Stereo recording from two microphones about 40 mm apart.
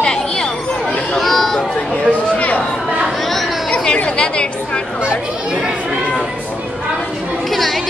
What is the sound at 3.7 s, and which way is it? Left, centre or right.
Chatter, left.